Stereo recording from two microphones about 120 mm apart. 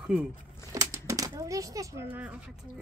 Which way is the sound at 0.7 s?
25° right (ahead or behind).